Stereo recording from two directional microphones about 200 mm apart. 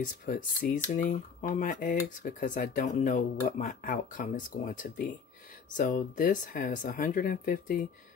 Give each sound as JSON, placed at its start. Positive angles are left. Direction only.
{"t": 0.2, "sound": "speech", "side_deg": 40}